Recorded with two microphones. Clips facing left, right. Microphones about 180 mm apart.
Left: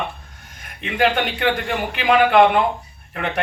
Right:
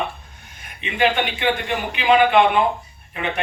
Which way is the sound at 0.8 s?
60° left (ahead or behind).